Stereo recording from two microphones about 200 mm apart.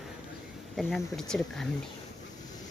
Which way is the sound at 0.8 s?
Centre (ahead or behind).